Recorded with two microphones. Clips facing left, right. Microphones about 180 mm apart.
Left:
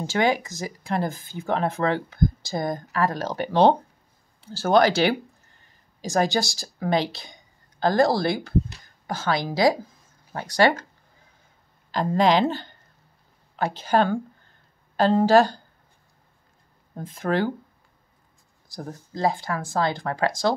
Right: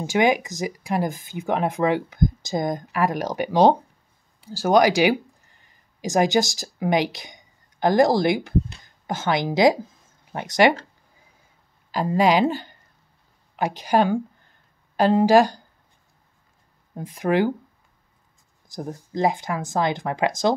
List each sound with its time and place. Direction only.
0.0 s speech: 15° right (ahead or behind)
11.9 s speech: 10° right (ahead or behind)
16.9 s speech: 15° right (ahead or behind)
18.7 s speech: 20° right (ahead or behind)